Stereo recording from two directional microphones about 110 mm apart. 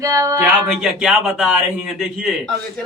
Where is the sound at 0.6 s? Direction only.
5° right (ahead or behind).